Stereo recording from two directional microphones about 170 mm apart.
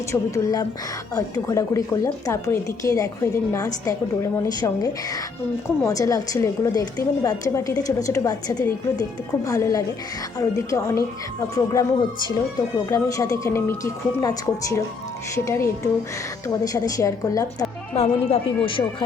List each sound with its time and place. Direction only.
0.1 s a woman's voice: 20° left (ahead or behind)
17.9 s speech: 35° left (ahead or behind)